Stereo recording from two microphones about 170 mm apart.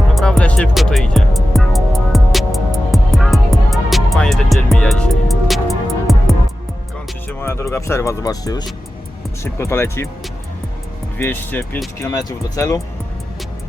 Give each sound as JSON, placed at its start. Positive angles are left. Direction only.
{"t": 0.1, "sound": "music", "side_deg": 0}
{"t": 7.3, "sound": "speech", "side_deg": 15}
{"t": 11.2, "sound": "speech", "side_deg": 10}